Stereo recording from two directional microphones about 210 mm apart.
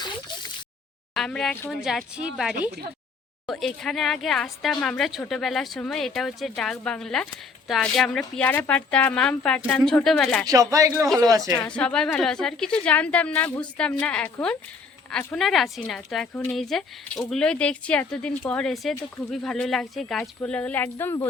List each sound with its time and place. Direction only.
1.1 s a woman's voice: centre (ahead or behind)
10.4 s speech: 15° right (ahead or behind)
11.6 s a woman's voice: 5° left (ahead or behind)